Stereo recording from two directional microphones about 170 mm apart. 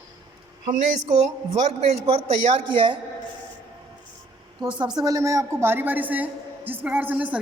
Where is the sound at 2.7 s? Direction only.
30° right (ahead or behind).